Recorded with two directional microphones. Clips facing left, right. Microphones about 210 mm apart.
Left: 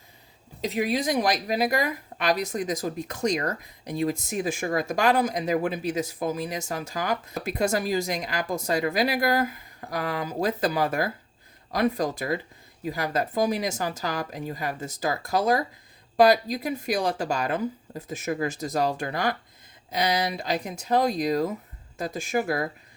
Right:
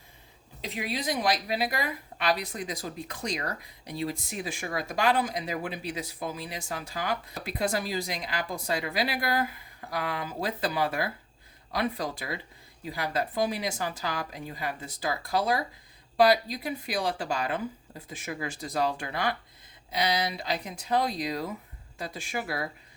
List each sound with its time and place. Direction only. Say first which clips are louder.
0.6 s a woman's voice: left 7 dB; 45° left (ahead or behind)